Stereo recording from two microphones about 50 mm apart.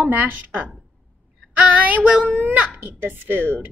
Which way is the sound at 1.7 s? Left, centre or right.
Right.